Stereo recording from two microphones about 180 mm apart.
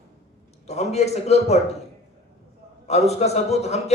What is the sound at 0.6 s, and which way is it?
Speech, 40° left (ahead or behind).